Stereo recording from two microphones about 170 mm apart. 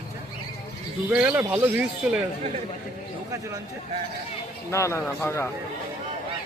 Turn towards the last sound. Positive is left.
turn(degrees=15)  # may be behind; listen again after turning